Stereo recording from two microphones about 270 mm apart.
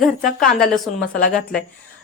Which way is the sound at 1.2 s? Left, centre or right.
Left.